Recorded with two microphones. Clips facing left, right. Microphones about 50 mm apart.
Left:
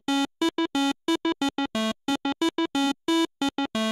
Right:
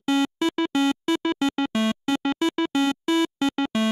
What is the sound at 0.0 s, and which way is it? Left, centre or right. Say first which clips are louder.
Music: right 3 dB; right.